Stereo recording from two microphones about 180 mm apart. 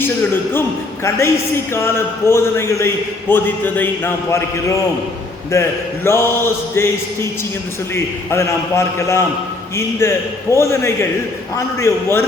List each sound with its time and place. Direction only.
0.0 s a man's voice: 10° left (ahead or behind)
1.7 s a man's voice: 15° left (ahead or behind)
5.5 s a man's voice: 15° left (ahead or behind)